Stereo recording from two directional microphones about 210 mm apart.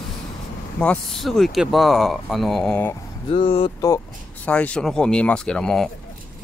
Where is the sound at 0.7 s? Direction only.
5° left (ahead or behind).